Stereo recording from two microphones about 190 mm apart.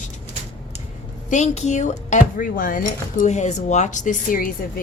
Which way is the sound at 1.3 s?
35° left (ahead or behind).